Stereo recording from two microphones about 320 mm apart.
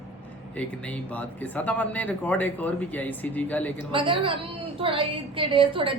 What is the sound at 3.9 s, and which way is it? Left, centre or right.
A woman's voice, centre.